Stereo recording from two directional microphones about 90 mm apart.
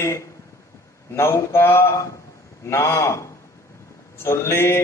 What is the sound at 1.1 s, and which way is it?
A man's voice, 30° left (ahead or behind).